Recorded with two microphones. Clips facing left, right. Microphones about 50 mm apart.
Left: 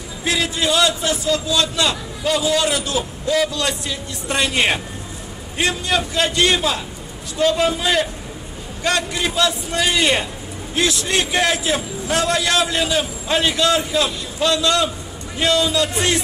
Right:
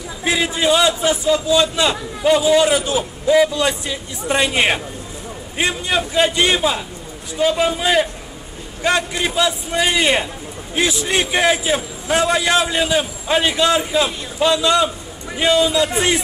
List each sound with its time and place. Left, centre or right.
0.2 s a man's voice: centre